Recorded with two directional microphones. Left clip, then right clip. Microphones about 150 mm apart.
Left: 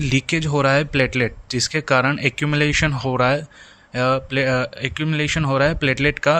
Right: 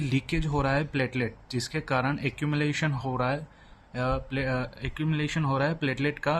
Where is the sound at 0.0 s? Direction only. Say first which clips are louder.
Left 10 dB; 40° left (ahead or behind).